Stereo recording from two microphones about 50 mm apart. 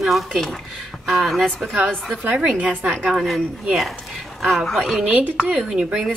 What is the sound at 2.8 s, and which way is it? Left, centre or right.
Speech, right.